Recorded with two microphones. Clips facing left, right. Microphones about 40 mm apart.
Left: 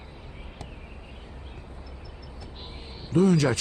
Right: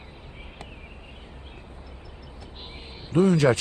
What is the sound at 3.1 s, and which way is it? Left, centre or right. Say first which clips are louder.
Speech: right 2 dB; right.